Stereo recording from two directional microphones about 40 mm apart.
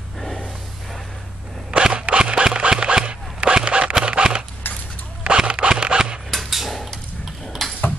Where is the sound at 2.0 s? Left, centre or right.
Right.